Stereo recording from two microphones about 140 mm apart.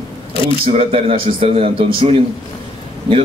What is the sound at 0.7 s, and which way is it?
A man's voice, 45° right (ahead or behind).